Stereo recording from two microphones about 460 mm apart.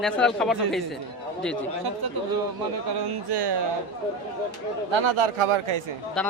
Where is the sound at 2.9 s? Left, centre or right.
Right.